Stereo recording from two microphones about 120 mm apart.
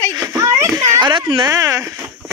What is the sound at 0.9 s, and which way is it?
Speech, 40° right (ahead or behind).